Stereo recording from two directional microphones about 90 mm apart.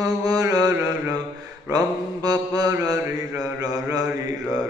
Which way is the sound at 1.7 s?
45° right (ahead or behind).